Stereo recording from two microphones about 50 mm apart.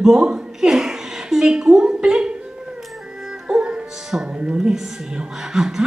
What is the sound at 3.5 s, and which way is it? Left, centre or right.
Music, centre.